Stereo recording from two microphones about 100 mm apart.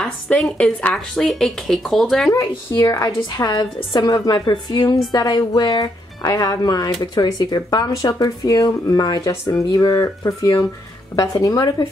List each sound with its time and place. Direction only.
0.0 s speech: 5° left (ahead or behind)
2.8 s a woman's voice: 40° left (ahead or behind)
9.3 s speech: 30° left (ahead or behind)
9.7 s speech: 40° left (ahead or behind)